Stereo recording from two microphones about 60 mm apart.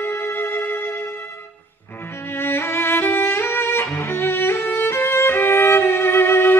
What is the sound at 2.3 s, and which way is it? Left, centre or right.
Music, left.